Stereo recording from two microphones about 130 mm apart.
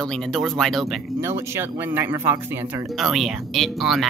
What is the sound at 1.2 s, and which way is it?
Speech, 20° right (ahead or behind).